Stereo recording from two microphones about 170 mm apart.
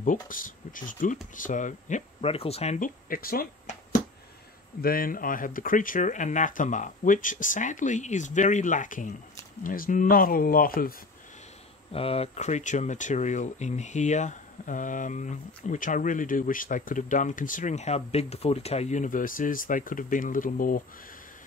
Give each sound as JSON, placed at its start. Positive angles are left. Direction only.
{"t": 0.0, "sound": "speech", "side_deg": 50}
{"t": 11.9, "sound": "speech", "side_deg": 35}